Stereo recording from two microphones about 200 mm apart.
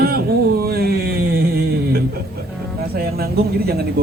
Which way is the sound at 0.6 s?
50° right (ahead or behind).